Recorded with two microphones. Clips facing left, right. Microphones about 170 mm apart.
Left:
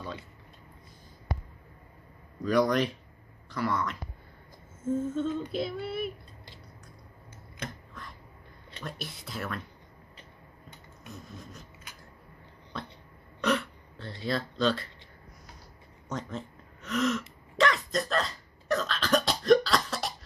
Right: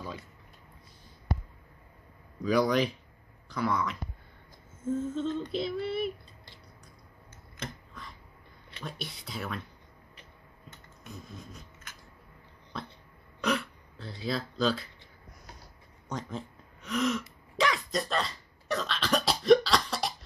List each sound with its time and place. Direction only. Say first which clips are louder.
2.4 s female singing: left 1 dB; centre (ahead or behind)
3.4 s speech: even; centre (ahead or behind)
4.9 s female singing: left 1 dB; 5° left (ahead or behind)
8.8 s female singing: even; centre (ahead or behind)
13.4 s a sound: left 2 dB; centre (ahead or behind)
16.1 s a sound: left 1 dB; centre (ahead or behind)
17.6 s cough: left 2 dB; centre (ahead or behind)